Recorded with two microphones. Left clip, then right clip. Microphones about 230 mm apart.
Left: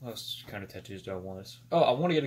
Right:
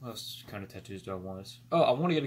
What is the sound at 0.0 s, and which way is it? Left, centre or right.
Speech, centre.